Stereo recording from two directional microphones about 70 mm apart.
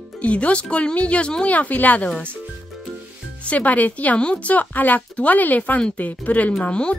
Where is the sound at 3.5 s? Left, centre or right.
Left.